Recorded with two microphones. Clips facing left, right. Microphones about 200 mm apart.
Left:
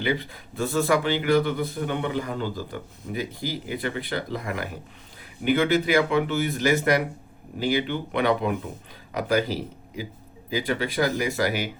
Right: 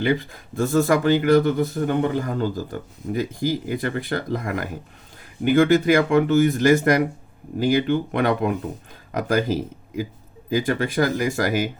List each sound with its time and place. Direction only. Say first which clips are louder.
0.0 s speech: right 5 dB; 50° right (ahead or behind)